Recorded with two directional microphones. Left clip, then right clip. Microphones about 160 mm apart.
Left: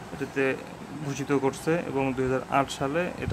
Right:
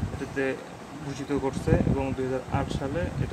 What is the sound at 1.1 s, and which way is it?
Speech, 25° left (ahead or behind).